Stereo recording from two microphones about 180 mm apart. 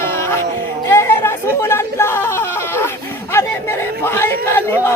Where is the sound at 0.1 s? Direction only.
15° left (ahead or behind).